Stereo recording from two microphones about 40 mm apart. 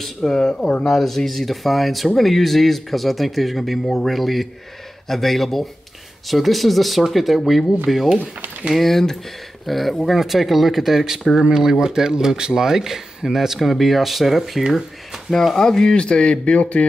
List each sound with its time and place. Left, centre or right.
0.0 s speech: centre
0.8 s speech: centre
14.7 s a sound: centre
15.5 s speech: centre; by 16.8 s left